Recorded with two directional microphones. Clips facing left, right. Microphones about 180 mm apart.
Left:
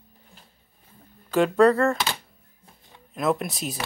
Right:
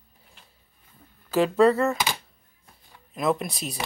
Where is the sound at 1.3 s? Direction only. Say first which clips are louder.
Left 1 dB; centre (ahead or behind).